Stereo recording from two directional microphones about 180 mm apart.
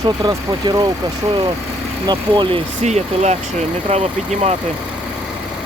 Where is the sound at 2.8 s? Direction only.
40° right (ahead or behind).